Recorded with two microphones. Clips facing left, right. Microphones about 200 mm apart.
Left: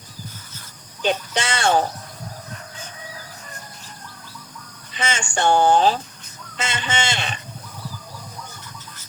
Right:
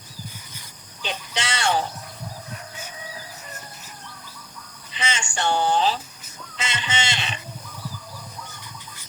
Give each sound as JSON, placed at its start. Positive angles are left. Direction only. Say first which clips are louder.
{"t": 1.0, "sound": "speech", "louder": "left 8 dB", "side_deg": 50}
{"t": 4.9, "sound": "speech", "louder": "left 4 dB", "side_deg": 50}